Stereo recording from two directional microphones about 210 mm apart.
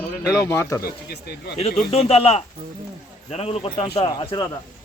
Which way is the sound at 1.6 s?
30° left (ahead or behind).